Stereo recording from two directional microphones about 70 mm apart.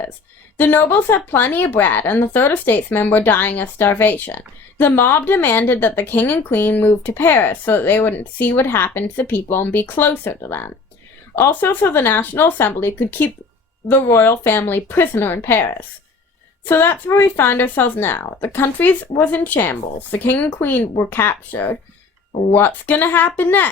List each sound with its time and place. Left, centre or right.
0.5 s a woman's voice: left